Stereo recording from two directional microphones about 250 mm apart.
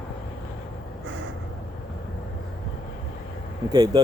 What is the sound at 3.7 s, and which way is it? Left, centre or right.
Speech, centre.